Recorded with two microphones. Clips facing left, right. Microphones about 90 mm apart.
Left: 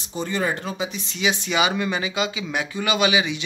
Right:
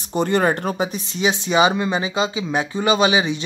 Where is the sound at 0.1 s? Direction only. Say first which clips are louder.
Right 7 dB; 60° right (ahead or behind).